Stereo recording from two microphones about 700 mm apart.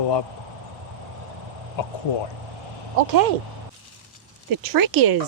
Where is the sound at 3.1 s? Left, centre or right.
Right.